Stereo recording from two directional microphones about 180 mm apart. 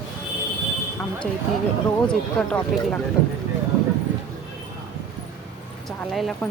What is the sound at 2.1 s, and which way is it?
Speech, 5° left (ahead or behind).